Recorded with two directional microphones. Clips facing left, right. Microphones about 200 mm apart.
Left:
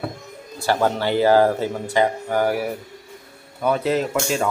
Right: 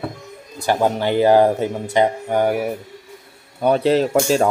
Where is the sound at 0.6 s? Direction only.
15° right (ahead or behind).